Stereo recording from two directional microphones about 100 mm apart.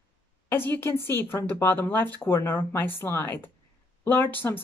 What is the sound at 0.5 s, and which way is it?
Speech, 20° left (ahead or behind).